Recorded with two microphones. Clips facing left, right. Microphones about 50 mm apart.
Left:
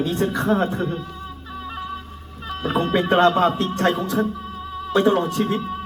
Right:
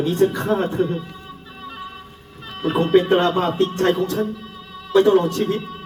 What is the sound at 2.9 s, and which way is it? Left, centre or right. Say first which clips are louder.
Speech: even; left.